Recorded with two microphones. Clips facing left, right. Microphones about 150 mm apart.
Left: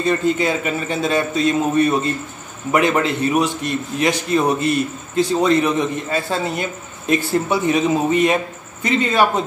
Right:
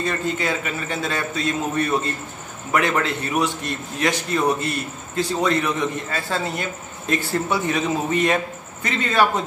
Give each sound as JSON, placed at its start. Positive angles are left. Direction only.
{"t": 0.0, "sound": "a man's voice", "side_deg": 20}